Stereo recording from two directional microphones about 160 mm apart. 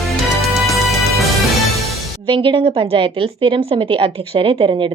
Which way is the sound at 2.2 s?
30° right (ahead or behind).